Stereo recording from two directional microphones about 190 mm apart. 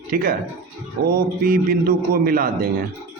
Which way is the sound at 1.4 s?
50° right (ahead or behind).